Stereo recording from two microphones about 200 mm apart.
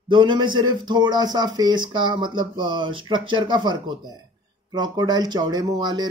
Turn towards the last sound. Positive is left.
turn(degrees=-20)  # may be behind; listen again after turning